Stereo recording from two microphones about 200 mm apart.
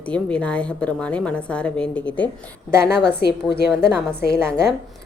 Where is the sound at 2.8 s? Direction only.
55° left (ahead or behind).